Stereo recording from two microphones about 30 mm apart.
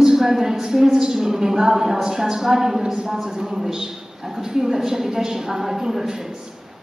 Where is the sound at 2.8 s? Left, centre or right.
Right.